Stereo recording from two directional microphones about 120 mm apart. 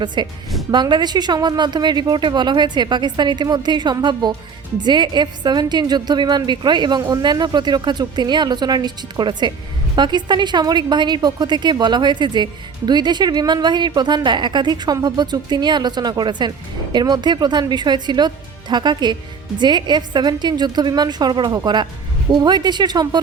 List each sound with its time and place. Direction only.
0.0 s a woman's voice: 40° right (ahead or behind)